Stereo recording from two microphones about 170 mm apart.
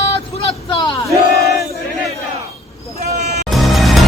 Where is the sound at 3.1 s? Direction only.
45° right (ahead or behind).